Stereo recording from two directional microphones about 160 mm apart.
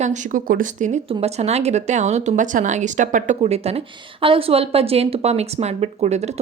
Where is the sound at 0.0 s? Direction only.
50° right (ahead or behind).